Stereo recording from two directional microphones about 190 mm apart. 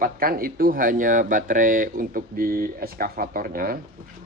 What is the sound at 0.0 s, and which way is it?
Speech, 50° right (ahead or behind).